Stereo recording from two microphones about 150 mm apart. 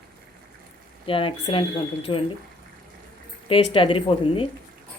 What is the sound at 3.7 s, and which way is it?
Speech, 35° left (ahead or behind).